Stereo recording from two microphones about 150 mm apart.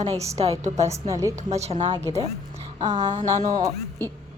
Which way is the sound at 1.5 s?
45° right (ahead or behind).